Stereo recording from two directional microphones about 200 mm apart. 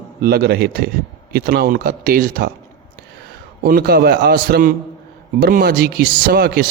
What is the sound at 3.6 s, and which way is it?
Speech, 50° right (ahead or behind).